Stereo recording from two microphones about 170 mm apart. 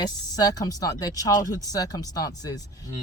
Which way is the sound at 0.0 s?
20° left (ahead or behind).